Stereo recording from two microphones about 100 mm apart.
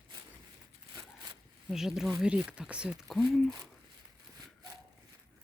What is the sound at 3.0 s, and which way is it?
Speech, 5° left (ahead or behind).